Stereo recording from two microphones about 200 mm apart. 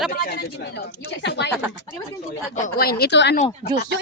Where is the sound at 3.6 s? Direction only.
30° left (ahead or behind).